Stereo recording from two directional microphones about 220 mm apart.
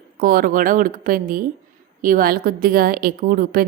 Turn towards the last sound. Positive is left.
turn(degrees=-40)  # may be behind; listen again after turning